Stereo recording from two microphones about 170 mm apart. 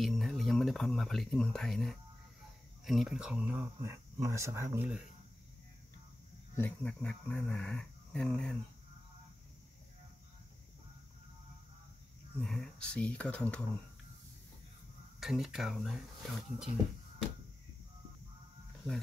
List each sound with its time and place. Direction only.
0.0 s speech: centre (ahead or behind); by 4.8 s 15° right (ahead or behind)
6.5 s speech: 10° left (ahead or behind)
12.4 s speech: 5° left (ahead or behind)
15.1 s speech: centre (ahead or behind)